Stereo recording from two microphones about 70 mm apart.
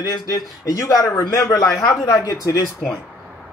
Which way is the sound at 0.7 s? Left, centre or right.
Left.